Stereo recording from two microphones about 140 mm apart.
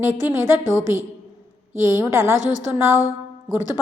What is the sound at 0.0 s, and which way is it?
A woman's voice, 15° right (ahead or behind).